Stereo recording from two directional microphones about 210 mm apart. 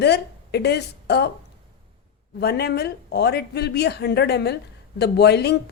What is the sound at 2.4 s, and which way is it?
Speech, 50° left (ahead or behind).